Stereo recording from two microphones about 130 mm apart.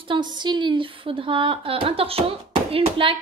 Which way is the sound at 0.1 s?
35° right (ahead or behind).